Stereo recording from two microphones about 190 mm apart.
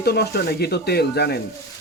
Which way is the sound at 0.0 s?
55° left (ahead or behind).